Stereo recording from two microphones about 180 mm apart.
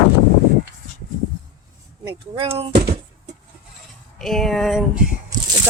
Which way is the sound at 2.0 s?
30° right (ahead or behind).